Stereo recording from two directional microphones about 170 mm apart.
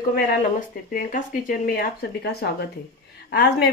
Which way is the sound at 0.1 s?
55° left (ahead or behind).